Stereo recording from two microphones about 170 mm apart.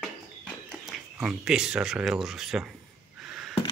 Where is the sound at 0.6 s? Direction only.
Centre (ahead or behind).